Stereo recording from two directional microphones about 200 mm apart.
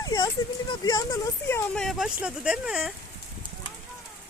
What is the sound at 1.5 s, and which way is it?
Speech, 5° left (ahead or behind).